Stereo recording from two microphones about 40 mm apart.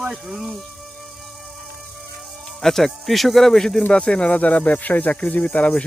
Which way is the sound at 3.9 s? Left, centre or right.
Left.